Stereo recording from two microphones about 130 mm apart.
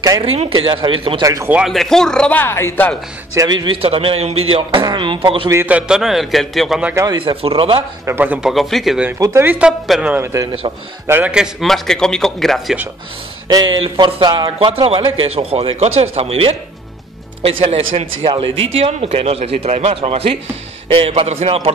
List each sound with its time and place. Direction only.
0.2 s speech: 45° right (ahead or behind)
1.2 s a man's voice: 25° right (ahead or behind)
1.5 s a man's voice: 5° right (ahead or behind); by 2.9 s 20° left (ahead or behind)
3.3 s speech: 35° right (ahead or behind)
5.5 s a man's voice: 15° right (ahead or behind)
7.2 s speech: 40° right (ahead or behind)
8.0 s a man's voice: 15° right (ahead or behind); by 9.0 s centre (ahead or behind)
9.2 s speech: 20° right (ahead or behind)
10.1 s a man's voice: 20° right (ahead or behind); by 12.7 s centre (ahead or behind)
13.5 s speech: 35° right (ahead or behind)
14.7 s speech: 45° right (ahead or behind)